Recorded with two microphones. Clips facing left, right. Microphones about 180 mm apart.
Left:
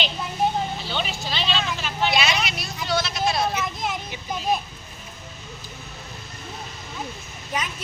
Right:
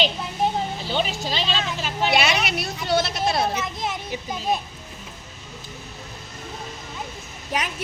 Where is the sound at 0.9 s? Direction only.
40° right (ahead or behind).